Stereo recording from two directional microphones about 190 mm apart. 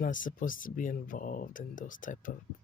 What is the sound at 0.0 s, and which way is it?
Speech, 45° left (ahead or behind).